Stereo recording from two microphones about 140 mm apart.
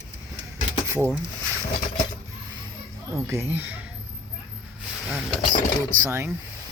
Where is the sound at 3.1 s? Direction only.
20° right (ahead or behind).